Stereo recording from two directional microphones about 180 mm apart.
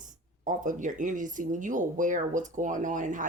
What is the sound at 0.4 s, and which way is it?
Speech, 45° right (ahead or behind).